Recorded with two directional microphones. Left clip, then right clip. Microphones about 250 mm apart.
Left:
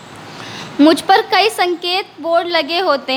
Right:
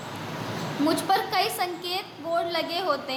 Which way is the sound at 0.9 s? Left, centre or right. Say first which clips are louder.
Left 12 dB; left.